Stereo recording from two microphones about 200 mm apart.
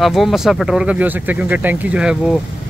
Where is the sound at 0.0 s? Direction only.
Centre (ahead or behind).